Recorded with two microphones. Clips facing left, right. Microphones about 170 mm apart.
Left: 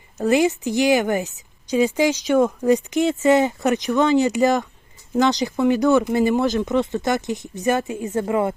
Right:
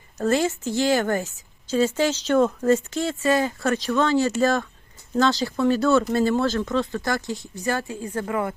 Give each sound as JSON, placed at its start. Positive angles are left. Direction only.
{"t": 0.3, "sound": "a woman's voice", "side_deg": 15}